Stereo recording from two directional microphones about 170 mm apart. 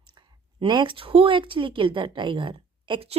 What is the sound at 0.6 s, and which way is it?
A woman's voice, 25° right (ahead or behind).